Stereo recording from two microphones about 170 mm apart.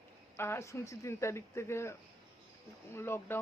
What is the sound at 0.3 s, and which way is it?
Speech, 15° left (ahead or behind).